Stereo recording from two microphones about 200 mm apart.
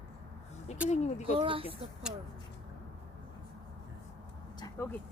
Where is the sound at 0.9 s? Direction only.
35° left (ahead or behind).